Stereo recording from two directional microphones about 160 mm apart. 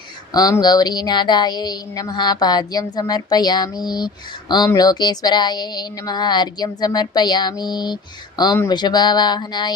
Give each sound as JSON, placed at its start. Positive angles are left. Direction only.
{"t": 0.3, "sound": "a woman's voice", "side_deg": 25}